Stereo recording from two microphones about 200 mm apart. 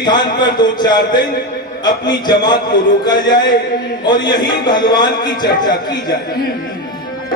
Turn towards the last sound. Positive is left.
turn(degrees=20)  # may be behind; listen again after turning